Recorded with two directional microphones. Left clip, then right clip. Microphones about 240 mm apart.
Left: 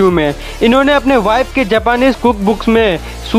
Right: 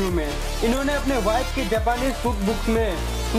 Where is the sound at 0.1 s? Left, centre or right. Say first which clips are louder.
Left 12 dB; left.